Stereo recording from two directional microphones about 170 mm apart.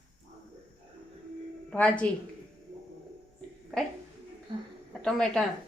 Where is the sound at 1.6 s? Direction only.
5° left (ahead or behind).